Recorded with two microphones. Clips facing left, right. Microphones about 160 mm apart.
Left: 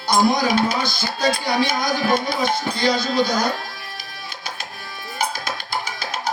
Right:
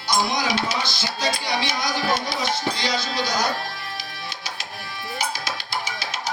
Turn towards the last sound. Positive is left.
turn(degrees=50)  # may be behind; listen again after turning